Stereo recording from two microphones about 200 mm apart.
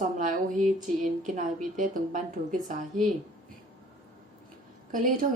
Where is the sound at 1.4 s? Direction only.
40° right (ahead or behind).